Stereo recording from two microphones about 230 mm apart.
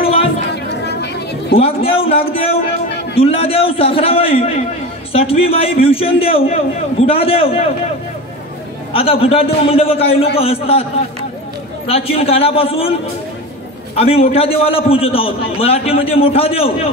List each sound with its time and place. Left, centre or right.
0.8 s chatter: left
1.6 s a man's voice: left
8.9 s a man's voice: left
11.9 s a man's voice: left
13.9 s a man's voice: left